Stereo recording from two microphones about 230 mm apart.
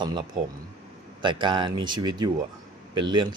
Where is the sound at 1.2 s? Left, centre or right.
Right.